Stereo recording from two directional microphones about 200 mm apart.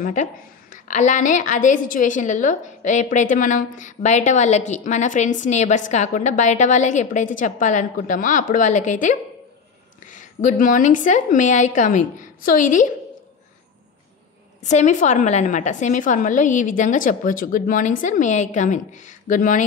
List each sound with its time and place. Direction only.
0.0 s a woman's voice: 40° left (ahead or behind)
10.1 s a woman's voice: 40° left (ahead or behind)
14.7 s a woman's voice: 35° left (ahead or behind)